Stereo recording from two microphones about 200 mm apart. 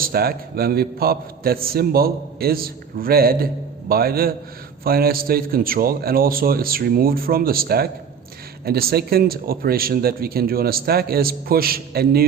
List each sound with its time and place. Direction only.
0.0 s a man's voice: 50° right (ahead or behind)